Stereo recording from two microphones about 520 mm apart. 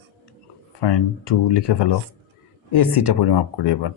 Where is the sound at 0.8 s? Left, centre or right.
Left.